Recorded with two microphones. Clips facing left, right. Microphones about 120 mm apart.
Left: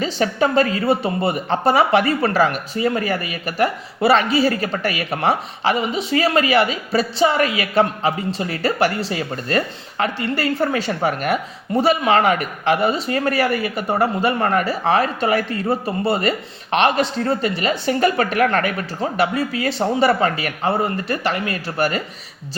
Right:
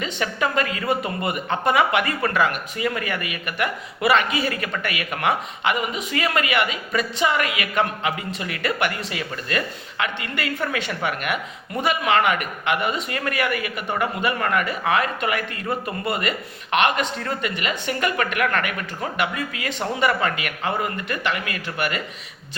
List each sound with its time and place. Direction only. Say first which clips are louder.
0.0 s speech: left 6 dB; 35° left (ahead or behind)